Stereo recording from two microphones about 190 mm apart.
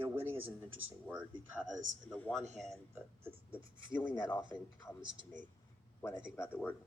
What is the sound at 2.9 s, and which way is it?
Speech, 10° right (ahead or behind).